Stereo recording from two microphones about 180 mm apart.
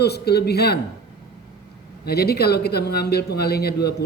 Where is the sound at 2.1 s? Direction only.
60° left (ahead or behind).